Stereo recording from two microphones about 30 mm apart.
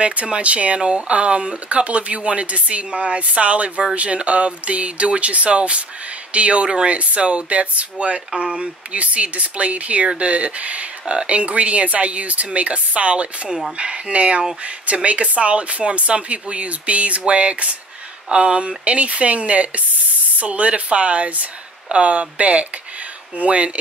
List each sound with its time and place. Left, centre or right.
0.0 s speech: right
0.7 s speech: right
8.9 s speech: right